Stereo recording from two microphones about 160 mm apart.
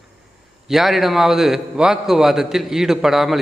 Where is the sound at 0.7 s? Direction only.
Centre (ahead or behind).